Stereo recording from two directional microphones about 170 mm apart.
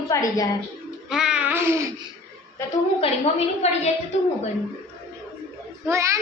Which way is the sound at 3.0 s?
40° left (ahead or behind).